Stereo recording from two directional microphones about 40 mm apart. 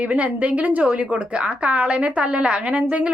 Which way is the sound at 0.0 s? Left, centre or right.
Right.